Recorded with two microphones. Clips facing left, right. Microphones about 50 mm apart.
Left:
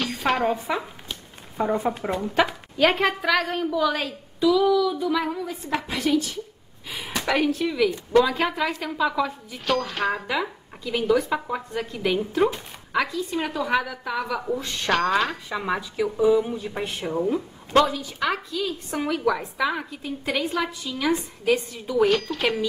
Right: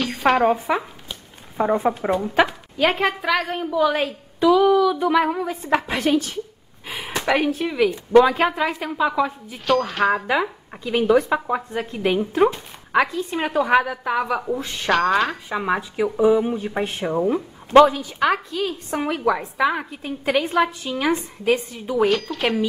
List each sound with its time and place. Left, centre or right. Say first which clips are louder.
0.0 s a sound: right 5 dB; centre
1.6 s a woman's voice: right 4 dB; centre
2.4 s a woman's voice: right 1 dB; centre
4.4 s a woman's voice: right 4 dB; right
6.9 s a woman's voice: right 4 dB; centre
8.5 s a woman's voice: right 3 dB; centre
9.7 s speech: right 5 dB; centre
10.2 s a woman's voice: right 5 dB; right
11.3 s a woman's voice: right 4 dB; right
14.4 s a woman's voice: right 2 dB; centre
14.9 s speech: right 3 dB; centre
15.5 s a woman's voice: right 4 dB; centre
22.0 s speech: right 1 dB; centre